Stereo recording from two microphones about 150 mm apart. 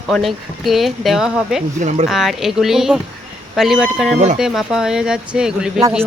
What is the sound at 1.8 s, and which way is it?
Speech, 50° right (ahead or behind).